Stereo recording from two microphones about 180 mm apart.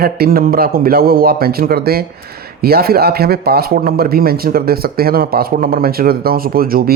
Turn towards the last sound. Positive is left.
turn(degrees=-55)  # may be behind; listen again after turning